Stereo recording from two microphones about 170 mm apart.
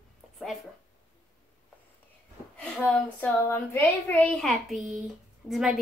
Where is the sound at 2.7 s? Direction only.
5° left (ahead or behind).